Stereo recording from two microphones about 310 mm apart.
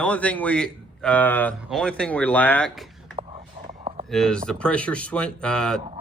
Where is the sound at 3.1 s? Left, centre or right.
Centre.